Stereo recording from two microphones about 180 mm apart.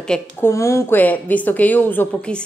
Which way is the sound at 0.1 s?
15° left (ahead or behind).